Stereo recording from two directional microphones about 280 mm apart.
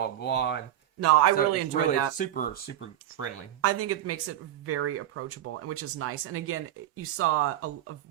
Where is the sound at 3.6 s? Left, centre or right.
Right.